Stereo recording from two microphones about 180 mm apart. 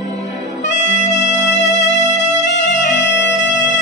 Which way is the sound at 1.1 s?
75° left (ahead or behind).